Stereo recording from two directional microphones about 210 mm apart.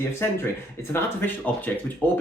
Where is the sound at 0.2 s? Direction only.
10° left (ahead or behind).